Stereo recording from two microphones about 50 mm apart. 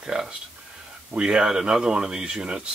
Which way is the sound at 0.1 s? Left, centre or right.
Centre.